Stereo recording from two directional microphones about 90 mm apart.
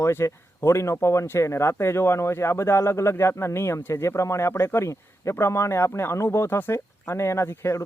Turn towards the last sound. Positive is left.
turn(degrees=30)  # may be behind; listen again after turning